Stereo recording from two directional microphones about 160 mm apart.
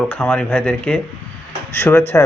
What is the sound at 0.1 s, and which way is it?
Speech, 10° left (ahead or behind).